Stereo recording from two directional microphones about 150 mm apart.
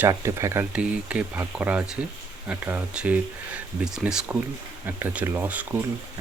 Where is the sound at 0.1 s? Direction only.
20° right (ahead or behind).